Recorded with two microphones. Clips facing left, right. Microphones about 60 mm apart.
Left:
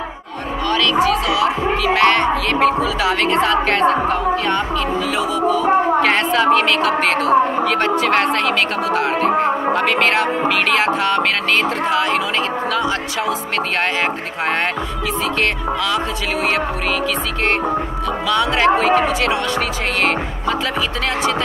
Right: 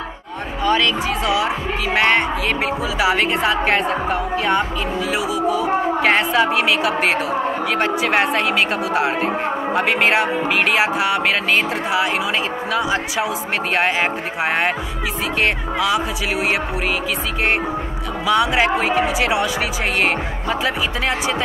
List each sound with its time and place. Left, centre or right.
1.0 s a woman's voice: right
18.2 s a woman's voice: centre